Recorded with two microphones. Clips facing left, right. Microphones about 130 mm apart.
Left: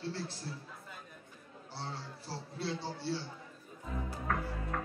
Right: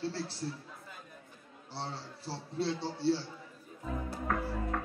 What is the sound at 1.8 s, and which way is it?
A man's voice, 30° right (ahead or behind).